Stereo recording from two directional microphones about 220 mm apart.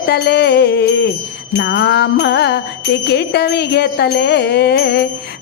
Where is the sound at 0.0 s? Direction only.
50° left (ahead or behind).